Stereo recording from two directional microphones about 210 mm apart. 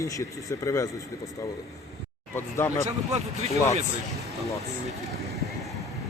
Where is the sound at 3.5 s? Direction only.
15° left (ahead or behind).